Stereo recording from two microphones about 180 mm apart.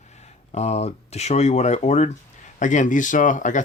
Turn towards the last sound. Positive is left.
turn(degrees=45)  # may be behind; listen again after turning